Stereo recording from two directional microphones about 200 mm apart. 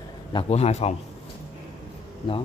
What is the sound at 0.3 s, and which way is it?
Speech, 30° left (ahead or behind).